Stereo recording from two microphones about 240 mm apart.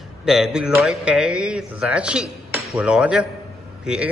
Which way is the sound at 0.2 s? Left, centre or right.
Centre.